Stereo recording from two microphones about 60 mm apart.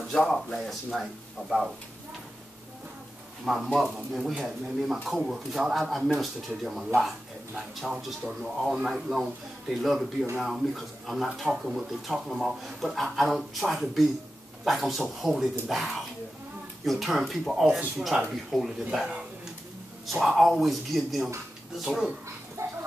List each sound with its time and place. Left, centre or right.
0.2 s speech: centre
3.6 s speech: centre
20.1 s speech: centre
22.6 s a sound: right